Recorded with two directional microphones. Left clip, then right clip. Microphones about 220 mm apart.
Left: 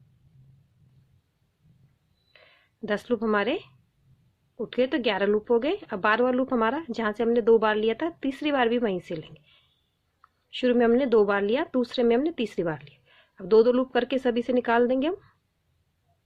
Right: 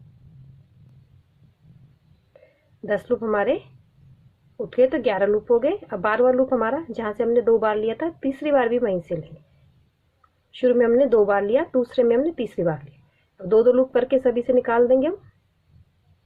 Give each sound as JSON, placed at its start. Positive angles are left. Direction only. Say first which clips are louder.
{"t": 2.8, "sound": "speech", "louder": "right 4 dB", "side_deg": 45}
{"t": 4.7, "sound": "speech", "louder": "right 6 dB", "side_deg": 45}
{"t": 10.5, "sound": "speech", "louder": "right 4 dB", "side_deg": 40}